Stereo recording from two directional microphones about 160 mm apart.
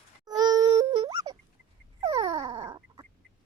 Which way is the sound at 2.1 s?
25° right (ahead or behind).